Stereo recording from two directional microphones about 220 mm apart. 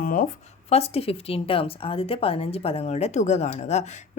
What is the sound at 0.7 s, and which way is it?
A woman's voice, 25° left (ahead or behind).